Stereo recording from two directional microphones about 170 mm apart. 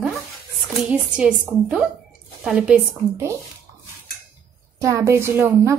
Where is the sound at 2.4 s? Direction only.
5° right (ahead or behind).